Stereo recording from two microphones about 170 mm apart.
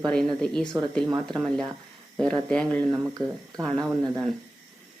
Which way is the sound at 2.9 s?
20° right (ahead or behind).